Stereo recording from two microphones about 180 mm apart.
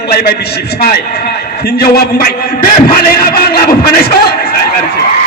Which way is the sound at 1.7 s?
55° left (ahead or behind).